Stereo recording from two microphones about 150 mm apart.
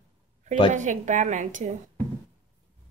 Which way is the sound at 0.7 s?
55° right (ahead or behind).